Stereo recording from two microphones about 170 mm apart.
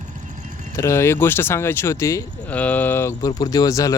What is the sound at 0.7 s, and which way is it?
Speech, 15° left (ahead or behind).